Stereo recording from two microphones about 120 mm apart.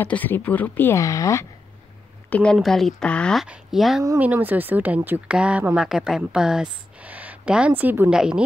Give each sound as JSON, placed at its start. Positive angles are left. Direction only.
{"t": 0.0, "sound": "speech", "side_deg": 15}
{"t": 2.2, "sound": "a sound", "side_deg": 10}
{"t": 2.5, "sound": "speech", "side_deg": 0}
{"t": 3.4, "sound": "speech", "side_deg": -5}
{"t": 4.2, "sound": "speech", "side_deg": -15}
{"t": 8.1, "sound": "speech", "side_deg": -5}